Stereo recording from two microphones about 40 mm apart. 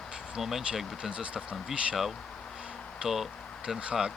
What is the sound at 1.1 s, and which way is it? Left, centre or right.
Speech, right.